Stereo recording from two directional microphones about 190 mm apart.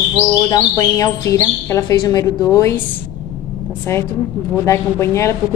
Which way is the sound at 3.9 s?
15° left (ahead or behind).